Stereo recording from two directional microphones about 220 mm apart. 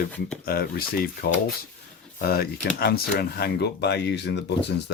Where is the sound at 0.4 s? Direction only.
45° left (ahead or behind).